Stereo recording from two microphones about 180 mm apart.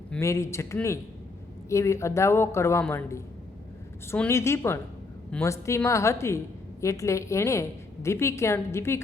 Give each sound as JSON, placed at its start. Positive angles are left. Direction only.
{"t": 0.2, "sound": "a woman's voice", "side_deg": 15}